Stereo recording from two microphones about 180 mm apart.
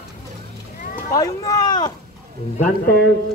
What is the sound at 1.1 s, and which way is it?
Speech, 20° left (ahead or behind).